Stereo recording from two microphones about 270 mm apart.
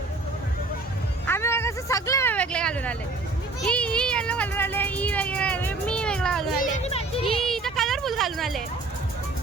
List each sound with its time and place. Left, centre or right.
1.3 s vehicle: centre
3.7 s speech: centre
6.6 s speech: left
7.4 s a sound: centre